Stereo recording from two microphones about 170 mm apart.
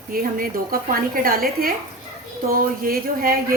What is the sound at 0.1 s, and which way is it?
A woman's voice, 60° right (ahead or behind).